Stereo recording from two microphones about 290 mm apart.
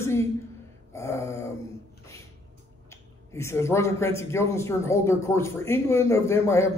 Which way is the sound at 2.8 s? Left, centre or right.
Centre.